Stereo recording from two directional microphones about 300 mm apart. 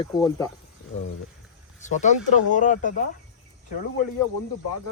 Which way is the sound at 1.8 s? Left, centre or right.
Left.